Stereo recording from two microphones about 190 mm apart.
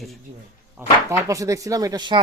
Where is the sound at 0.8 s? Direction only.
10° right (ahead or behind).